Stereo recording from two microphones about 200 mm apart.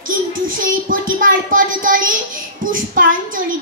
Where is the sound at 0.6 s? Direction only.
45° right (ahead or behind).